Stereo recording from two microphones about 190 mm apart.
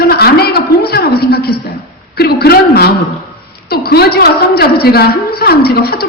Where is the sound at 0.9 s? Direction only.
55° left (ahead or behind).